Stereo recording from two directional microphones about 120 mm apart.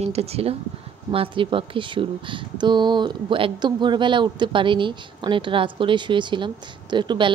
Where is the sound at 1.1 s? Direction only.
50° right (ahead or behind).